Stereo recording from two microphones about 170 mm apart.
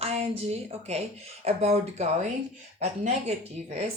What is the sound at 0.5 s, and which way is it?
A woman's voice, 40° right (ahead or behind).